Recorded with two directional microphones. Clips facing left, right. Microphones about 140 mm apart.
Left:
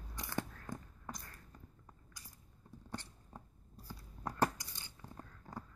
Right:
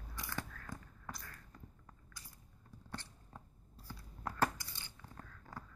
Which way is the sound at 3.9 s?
15° left (ahead or behind).